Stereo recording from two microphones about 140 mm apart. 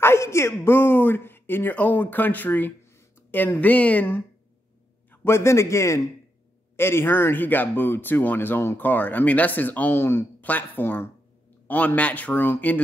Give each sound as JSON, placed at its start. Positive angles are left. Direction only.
{"t": 0.0, "sound": "a man's voice", "side_deg": 20}